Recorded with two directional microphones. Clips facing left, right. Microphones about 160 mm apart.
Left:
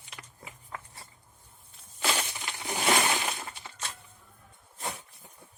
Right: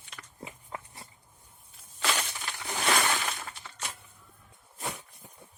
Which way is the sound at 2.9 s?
20° left (ahead or behind).